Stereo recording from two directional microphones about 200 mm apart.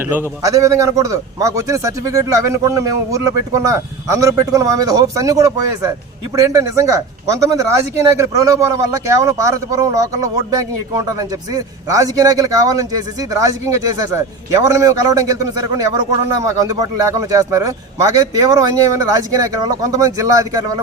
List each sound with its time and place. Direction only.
0.1 s speech: 15° right (ahead or behind)